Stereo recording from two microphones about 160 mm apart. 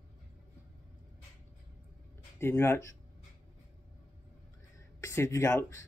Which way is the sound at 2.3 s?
15° left (ahead or behind).